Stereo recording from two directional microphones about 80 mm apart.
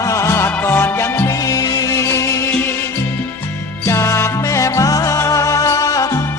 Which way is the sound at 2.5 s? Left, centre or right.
Left.